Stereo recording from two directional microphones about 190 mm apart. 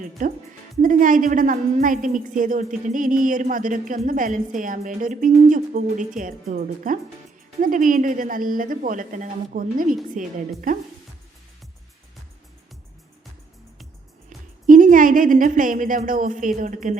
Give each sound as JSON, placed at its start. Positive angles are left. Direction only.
{"t": 0.2, "sound": "a woman's voice", "side_deg": -45}
{"t": 14.3, "sound": "a woman's voice", "side_deg": -45}